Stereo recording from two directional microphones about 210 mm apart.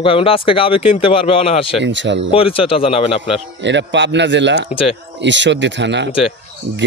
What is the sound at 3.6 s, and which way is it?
Speech, 60° right (ahead or behind).